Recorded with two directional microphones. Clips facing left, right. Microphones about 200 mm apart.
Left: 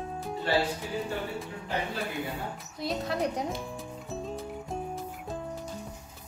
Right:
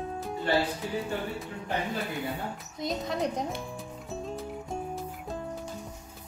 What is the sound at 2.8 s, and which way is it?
Music, 5° left (ahead or behind).